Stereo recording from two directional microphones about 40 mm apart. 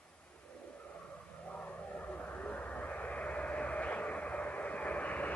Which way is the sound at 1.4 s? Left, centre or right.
Left.